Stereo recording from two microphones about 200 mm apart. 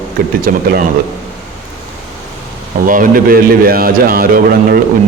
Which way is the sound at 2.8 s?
40° right (ahead or behind).